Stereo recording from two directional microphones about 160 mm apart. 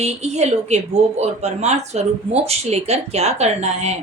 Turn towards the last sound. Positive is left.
turn(degrees=-45)  # may be behind; listen again after turning